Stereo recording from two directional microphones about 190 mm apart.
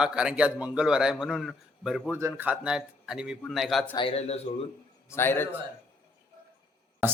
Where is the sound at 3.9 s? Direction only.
30° left (ahead or behind).